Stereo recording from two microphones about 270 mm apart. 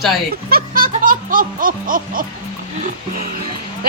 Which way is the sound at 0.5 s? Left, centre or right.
Right.